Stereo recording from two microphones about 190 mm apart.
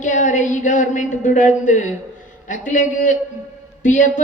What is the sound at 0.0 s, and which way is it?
A woman's voice, 40° left (ahead or behind).